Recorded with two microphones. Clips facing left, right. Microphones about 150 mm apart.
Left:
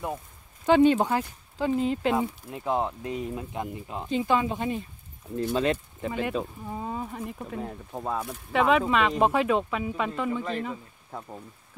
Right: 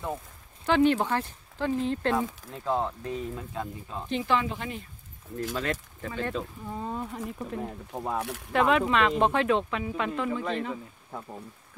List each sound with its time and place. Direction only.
0.7 s speech: 15° left (ahead or behind)